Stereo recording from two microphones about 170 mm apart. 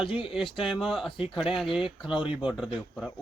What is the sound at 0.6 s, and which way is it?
Speech, centre (ahead or behind).